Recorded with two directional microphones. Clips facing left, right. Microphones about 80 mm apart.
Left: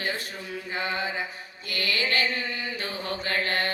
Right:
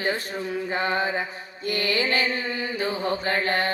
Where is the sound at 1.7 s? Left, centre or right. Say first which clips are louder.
Right 3 dB; right.